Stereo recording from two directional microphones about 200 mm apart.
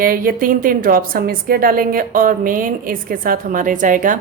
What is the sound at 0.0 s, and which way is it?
A woman's voice, 45° right (ahead or behind).